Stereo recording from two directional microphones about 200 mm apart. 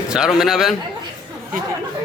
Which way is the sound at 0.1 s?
Centre (ahead or behind).